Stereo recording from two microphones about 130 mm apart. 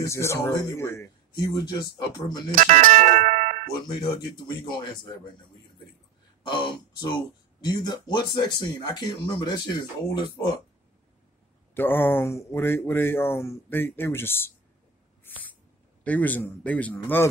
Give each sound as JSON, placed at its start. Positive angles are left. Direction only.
{"t": 0.0, "sound": "speech", "side_deg": 20}
{"t": 2.5, "sound": "speech", "side_deg": -80}
{"t": 4.5, "sound": "speech", "side_deg": 35}
{"t": 6.4, "sound": "speech", "side_deg": 40}
{"t": 11.7, "sound": "speech", "side_deg": 15}
{"t": 16.0, "sound": "speech", "side_deg": 10}